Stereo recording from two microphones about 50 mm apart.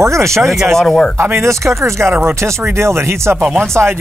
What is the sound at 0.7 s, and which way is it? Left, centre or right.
Speech, centre.